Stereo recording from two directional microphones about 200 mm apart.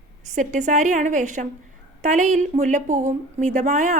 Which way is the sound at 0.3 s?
35° right (ahead or behind).